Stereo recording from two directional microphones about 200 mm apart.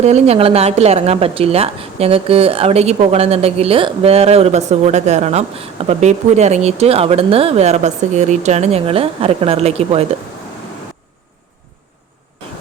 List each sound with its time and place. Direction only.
0.0 s a woman's voice: 30° right (ahead or behind)